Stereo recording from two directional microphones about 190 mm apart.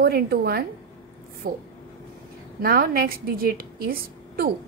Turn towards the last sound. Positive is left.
turn(degrees=-50)  # may be behind; listen again after turning